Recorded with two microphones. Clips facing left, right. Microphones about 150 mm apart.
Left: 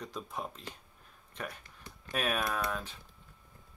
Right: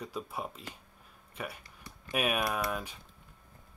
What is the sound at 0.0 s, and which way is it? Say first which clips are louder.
Speech: right 2 dB; 10° right (ahead or behind).